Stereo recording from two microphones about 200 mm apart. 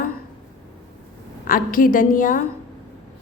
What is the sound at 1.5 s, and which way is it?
Speech, 45° left (ahead or behind).